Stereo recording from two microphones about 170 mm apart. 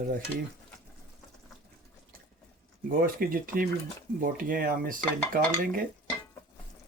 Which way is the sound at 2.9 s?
55° right (ahead or behind).